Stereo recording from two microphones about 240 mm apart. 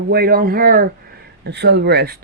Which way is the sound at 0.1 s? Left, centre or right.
Right.